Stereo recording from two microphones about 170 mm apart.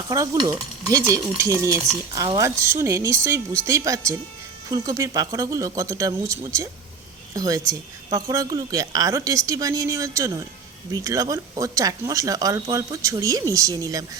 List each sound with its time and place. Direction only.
0.1 s speech: 20° right (ahead or behind)